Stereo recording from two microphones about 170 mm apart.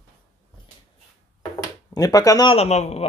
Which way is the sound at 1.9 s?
20° left (ahead or behind).